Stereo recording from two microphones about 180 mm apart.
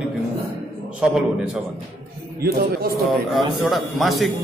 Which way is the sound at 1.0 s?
5° right (ahead or behind).